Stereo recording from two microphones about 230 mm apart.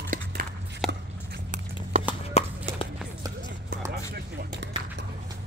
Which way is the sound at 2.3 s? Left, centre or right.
Left.